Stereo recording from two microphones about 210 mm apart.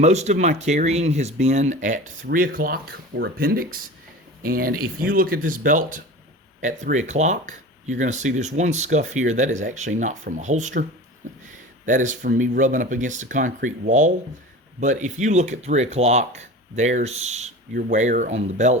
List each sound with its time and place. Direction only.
0.0 s speech: 35° right (ahead or behind)
11.9 s speech: 40° right (ahead or behind)